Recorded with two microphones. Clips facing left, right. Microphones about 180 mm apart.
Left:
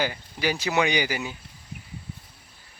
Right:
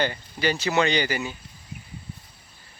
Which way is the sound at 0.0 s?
10° left (ahead or behind).